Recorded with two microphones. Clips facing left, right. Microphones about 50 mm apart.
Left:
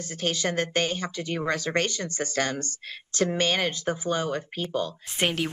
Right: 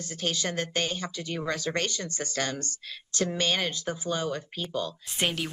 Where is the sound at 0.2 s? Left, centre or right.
Left.